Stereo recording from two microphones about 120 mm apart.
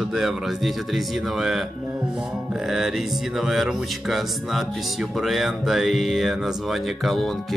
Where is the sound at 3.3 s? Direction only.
Centre (ahead or behind).